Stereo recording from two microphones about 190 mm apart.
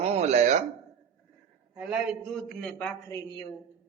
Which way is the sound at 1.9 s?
5° right (ahead or behind).